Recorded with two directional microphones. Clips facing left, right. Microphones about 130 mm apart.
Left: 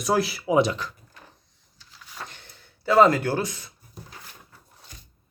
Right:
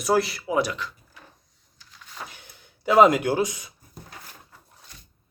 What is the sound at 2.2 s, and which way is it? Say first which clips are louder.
Gasp: even; 10° right (ahead or behind).